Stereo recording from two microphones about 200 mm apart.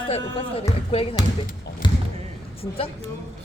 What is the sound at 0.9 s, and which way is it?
Speech, 30° left (ahead or behind).